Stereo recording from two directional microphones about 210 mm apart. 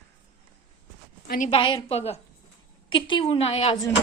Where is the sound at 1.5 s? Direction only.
25° left (ahead or behind).